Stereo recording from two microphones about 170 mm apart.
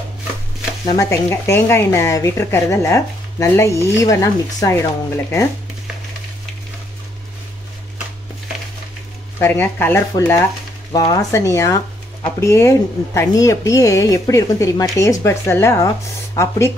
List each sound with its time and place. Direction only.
0.8 s speech: 20° left (ahead or behind)
9.4 s speech: 15° left (ahead or behind)
10.9 s speech: 25° left (ahead or behind)